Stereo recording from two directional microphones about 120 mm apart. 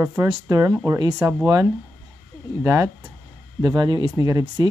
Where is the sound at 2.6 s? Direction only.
25° right (ahead or behind).